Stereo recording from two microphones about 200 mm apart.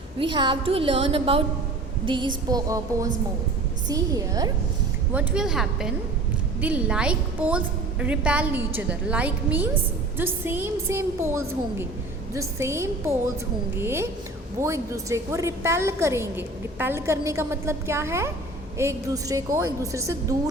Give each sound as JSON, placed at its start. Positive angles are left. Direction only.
{"t": 0.2, "sound": "a woman's voice", "side_deg": -25}
{"t": 5.1, "sound": "a woman's voice", "side_deg": -5}